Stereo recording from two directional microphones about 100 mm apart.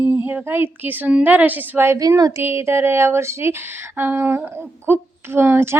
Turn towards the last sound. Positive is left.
turn(degrees=-25)  # may be behind; listen again after turning